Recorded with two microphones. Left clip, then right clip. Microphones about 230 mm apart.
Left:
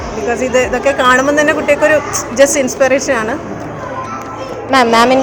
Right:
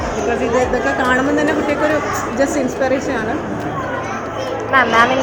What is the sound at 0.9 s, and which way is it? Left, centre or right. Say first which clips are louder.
Speech: left 6 dB; left.